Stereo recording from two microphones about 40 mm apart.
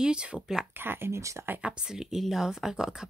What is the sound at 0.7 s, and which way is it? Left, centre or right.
Speech, right.